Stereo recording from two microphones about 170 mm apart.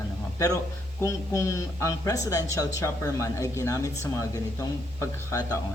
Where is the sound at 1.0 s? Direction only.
15° left (ahead or behind).